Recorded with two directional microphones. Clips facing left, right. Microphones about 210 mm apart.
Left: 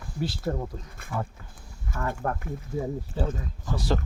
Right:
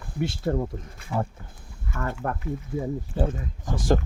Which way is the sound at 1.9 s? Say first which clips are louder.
Even; 50° left (ahead or behind).